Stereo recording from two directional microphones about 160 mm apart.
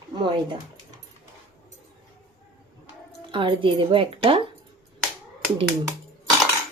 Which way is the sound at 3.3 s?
30° right (ahead or behind).